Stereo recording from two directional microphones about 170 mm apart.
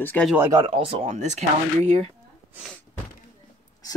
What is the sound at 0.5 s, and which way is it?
Speech, 30° right (ahead or behind).